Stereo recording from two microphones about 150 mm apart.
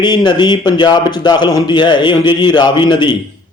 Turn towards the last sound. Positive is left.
turn(degrees=30)  # may be behind; listen again after turning